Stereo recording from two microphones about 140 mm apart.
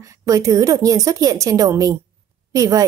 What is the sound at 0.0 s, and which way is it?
A woman's voice, 25° right (ahead or behind).